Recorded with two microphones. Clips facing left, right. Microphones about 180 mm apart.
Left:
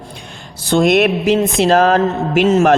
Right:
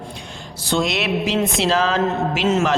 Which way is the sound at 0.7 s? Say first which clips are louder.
Left 8 dB; 50° left (ahead or behind).